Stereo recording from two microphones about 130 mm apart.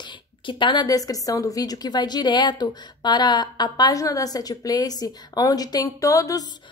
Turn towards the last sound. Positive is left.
turn(degrees=25)  # may be behind; listen again after turning